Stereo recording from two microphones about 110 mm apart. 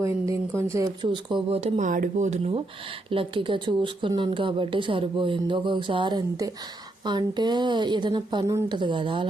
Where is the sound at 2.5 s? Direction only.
55° right (ahead or behind).